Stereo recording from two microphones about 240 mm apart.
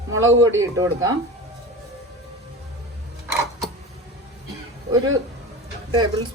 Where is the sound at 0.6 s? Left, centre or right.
Centre.